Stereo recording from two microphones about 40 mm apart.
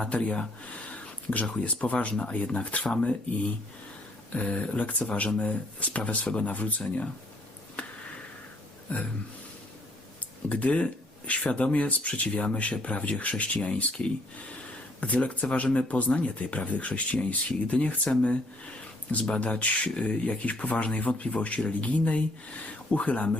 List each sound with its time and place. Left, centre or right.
0.0 s speech: left
8.9 s speech: left
10.5 s speech: left
15.0 s speech: left